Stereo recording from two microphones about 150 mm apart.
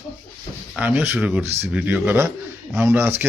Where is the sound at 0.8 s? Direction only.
10° right (ahead or behind).